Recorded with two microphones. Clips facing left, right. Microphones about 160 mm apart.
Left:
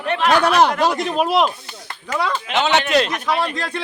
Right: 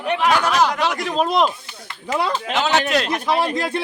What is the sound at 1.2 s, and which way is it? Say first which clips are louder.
Speech: even; 5° left (ahead or behind).